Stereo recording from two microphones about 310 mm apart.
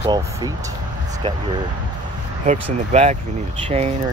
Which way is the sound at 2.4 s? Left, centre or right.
Right.